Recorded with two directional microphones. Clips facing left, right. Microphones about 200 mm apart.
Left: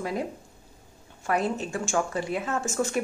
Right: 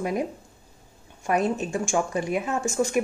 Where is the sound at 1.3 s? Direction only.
20° right (ahead or behind).